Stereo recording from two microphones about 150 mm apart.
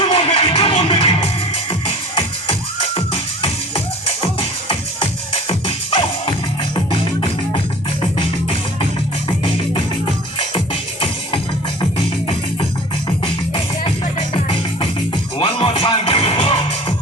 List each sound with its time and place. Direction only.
0.1 s music: 40° left (ahead or behind)
4.0 s music: 40° left (ahead or behind)
13.2 s music: 35° left (ahead or behind)